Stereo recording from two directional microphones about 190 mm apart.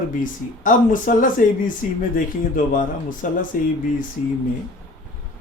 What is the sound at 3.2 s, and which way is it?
Speech, 45° left (ahead or behind).